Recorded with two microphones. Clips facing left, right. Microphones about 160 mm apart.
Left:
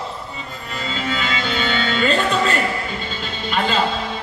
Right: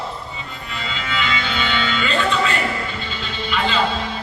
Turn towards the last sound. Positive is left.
turn(degrees=45)  # may be behind; listen again after turning